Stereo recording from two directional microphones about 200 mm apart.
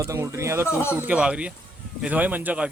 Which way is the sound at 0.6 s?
15° left (ahead or behind).